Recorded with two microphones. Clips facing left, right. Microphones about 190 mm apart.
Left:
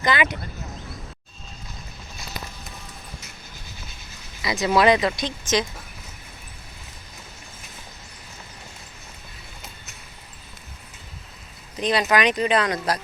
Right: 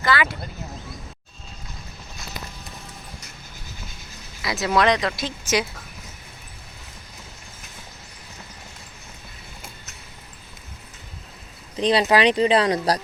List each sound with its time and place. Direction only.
0.0 s speech: 20° left (ahead or behind)
4.4 s speech: centre (ahead or behind)
11.8 s speech: 30° right (ahead or behind)